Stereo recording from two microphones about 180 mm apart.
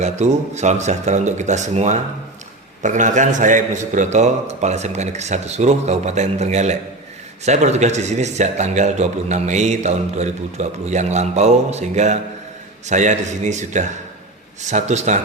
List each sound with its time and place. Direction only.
0.0 s a man's voice: 40° right (ahead or behind)